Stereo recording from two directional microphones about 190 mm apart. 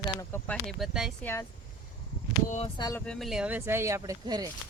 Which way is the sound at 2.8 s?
15° left (ahead or behind).